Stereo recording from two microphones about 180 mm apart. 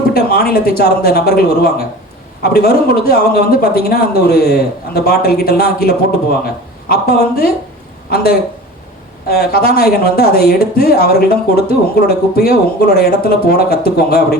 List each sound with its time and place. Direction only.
0.1 s speech: 60° left (ahead or behind)